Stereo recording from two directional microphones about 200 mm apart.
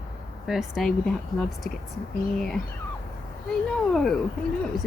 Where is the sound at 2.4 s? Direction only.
Centre (ahead or behind).